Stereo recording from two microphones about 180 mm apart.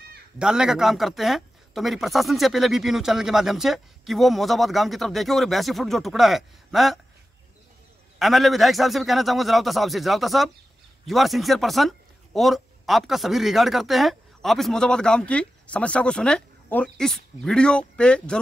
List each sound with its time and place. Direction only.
0.4 s speech: 5° right (ahead or behind)
8.2 s speech: centre (ahead or behind)